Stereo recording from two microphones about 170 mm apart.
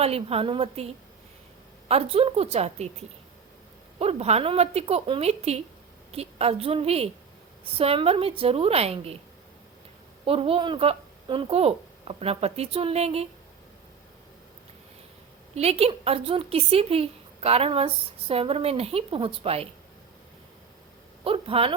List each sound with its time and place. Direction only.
0.0 s speech: 35° right (ahead or behind)
1.9 s speech: 35° right (ahead or behind)
3.9 s speech: 35° right (ahead or behind)
10.2 s speech: 35° right (ahead or behind)
15.5 s speech: 35° right (ahead or behind)
21.2 s speech: 35° right (ahead or behind)